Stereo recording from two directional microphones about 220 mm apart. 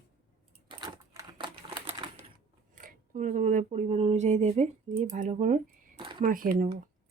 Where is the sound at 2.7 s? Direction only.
40° right (ahead or behind).